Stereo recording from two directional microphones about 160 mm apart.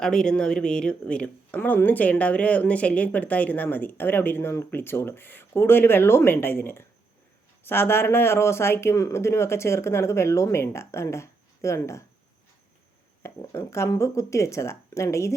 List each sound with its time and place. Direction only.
0.0 s speech: 5° left (ahead or behind)
13.2 s speech: 15° left (ahead or behind)